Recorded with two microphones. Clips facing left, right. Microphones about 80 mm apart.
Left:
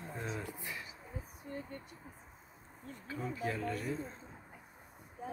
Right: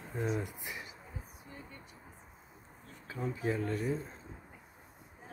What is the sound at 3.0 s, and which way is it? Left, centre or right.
Speech, centre.